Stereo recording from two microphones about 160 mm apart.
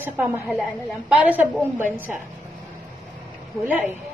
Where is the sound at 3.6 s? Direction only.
10° right (ahead or behind).